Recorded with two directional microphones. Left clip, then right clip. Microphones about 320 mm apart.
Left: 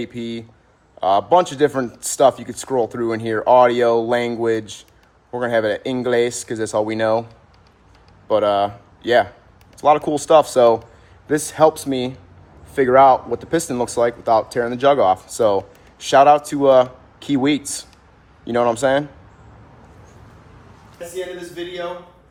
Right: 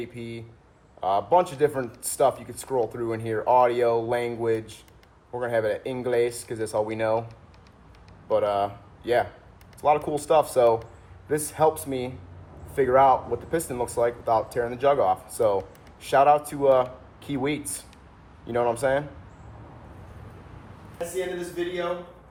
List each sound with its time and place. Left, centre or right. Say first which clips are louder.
0.0 s speech: left 8 dB; left
8.3 s speech: left 7 dB; left